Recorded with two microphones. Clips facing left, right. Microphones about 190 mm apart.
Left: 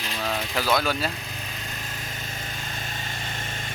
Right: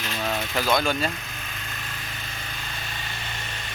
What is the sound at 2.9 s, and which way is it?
Vehicle, 45° left (ahead or behind).